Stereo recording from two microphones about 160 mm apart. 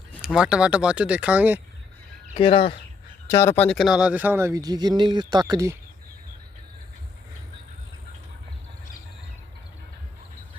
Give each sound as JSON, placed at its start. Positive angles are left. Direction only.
{"t": 0.3, "sound": "speech", "side_deg": -5}
{"t": 2.3, "sound": "speech", "side_deg": 35}
{"t": 3.2, "sound": "speech", "side_deg": 15}